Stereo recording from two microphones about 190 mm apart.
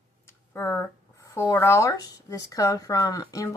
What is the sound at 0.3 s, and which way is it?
Speech, 15° left (ahead or behind).